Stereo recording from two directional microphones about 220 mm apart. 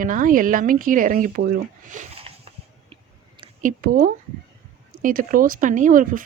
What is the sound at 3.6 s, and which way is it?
Speech, 35° right (ahead or behind).